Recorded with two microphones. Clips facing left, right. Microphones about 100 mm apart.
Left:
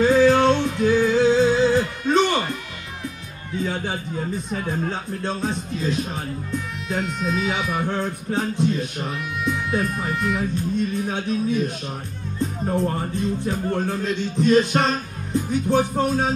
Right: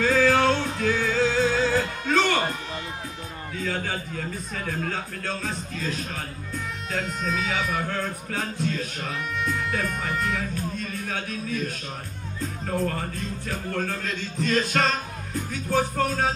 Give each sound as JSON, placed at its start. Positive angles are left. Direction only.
{"t": 0.0, "sound": "music", "side_deg": 20}
{"t": 3.6, "sound": "a man's voice", "side_deg": 25}
{"t": 6.9, "sound": "speech", "side_deg": 5}
{"t": 7.9, "sound": "a man's voice", "side_deg": 25}
{"t": 9.4, "sound": "speech", "side_deg": 5}
{"t": 10.8, "sound": "a man's voice", "side_deg": 25}
{"t": 15.7, "sound": "music", "side_deg": 15}